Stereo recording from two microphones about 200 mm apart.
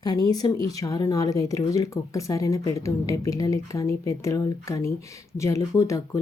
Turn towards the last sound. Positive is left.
turn(degrees=15)  # may be behind; listen again after turning